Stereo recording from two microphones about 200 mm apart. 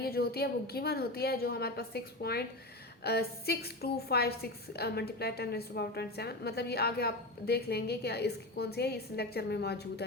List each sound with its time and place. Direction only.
0.0 s a woman's voice: 50° left (ahead or behind)